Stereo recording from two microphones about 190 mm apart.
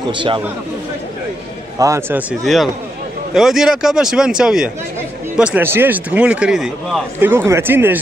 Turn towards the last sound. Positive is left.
turn(degrees=-10)  # may be behind; listen again after turning